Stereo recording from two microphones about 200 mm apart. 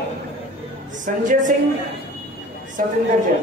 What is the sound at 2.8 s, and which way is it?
Speech, 40° right (ahead or behind).